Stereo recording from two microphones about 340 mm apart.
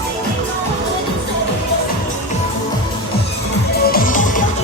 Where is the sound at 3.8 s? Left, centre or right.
Left.